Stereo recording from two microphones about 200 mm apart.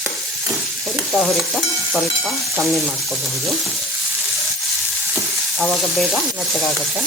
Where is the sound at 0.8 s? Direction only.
Centre (ahead or behind).